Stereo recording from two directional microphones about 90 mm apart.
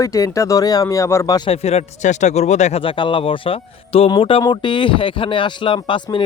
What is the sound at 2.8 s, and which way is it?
Speech, 70° left (ahead or behind).